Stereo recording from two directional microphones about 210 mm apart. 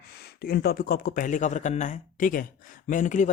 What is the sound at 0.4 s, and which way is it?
A man's voice, 45° left (ahead or behind).